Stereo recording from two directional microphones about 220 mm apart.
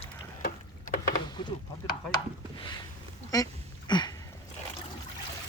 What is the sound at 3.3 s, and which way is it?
Quack, 15° left (ahead or behind).